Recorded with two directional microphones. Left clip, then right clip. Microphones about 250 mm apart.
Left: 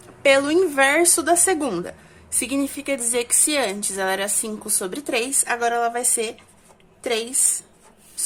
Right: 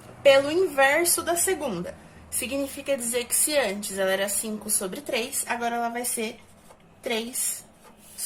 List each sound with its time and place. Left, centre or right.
0.2 s a woman's voice: left